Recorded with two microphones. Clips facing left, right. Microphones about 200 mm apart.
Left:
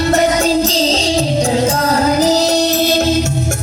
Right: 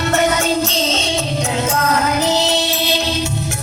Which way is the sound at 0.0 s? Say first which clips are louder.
Left 4 dB; 35° left (ahead or behind).